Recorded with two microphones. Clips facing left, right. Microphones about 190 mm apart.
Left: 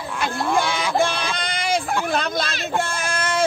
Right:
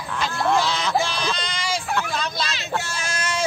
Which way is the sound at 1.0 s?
55° left (ahead or behind).